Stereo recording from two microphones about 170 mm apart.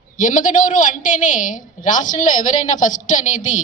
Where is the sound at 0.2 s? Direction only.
50° left (ahead or behind).